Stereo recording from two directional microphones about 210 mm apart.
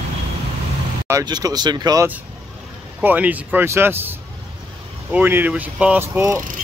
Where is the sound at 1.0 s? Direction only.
15° right (ahead or behind).